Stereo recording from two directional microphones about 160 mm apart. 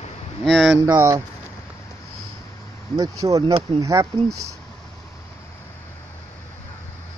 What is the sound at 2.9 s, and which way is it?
Speech, 25° right (ahead or behind).